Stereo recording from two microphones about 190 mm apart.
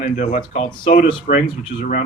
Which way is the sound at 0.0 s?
35° left (ahead or behind).